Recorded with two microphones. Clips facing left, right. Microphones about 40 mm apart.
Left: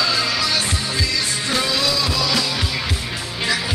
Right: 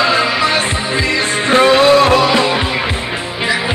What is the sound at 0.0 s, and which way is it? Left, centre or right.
Music, right.